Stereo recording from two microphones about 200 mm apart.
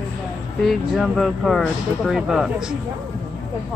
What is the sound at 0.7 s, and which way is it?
Speech, centre (ahead or behind).